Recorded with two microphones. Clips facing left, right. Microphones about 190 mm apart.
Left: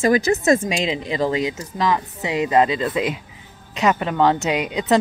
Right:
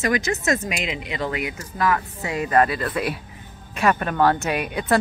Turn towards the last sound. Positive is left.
turn(degrees=15)  # may be behind; listen again after turning